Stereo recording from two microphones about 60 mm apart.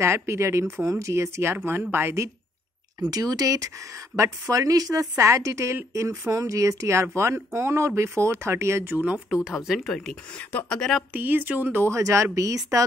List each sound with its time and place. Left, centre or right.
0.0 s speech: right
3.1 s speech: right
4.2 s speech: right
5.2 s speech: right
8.9 s speech: right
9.4 s speech: centre
11.1 s speech: right
11.9 s speech: right